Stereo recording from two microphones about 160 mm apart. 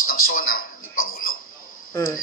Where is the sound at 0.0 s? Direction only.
65° left (ahead or behind).